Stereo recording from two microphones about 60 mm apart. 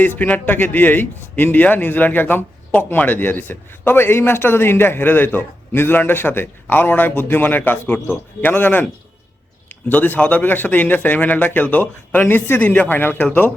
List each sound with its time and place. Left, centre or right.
0.0 s a man's voice: left